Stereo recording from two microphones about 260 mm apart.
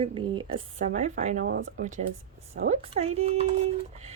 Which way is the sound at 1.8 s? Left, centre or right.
Right.